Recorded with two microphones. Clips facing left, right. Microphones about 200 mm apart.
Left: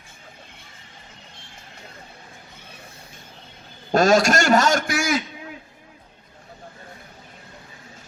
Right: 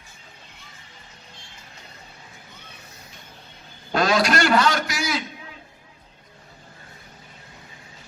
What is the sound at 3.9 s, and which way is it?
A man's voice, 45° left (ahead or behind).